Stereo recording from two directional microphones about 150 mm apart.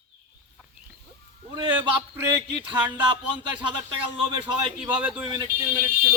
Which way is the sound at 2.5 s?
30° right (ahead or behind).